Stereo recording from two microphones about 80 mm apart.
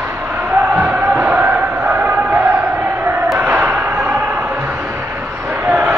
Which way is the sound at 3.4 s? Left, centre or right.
Centre.